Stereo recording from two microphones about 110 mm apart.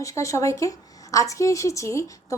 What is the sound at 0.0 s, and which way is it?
A woman's voice, 30° left (ahead or behind).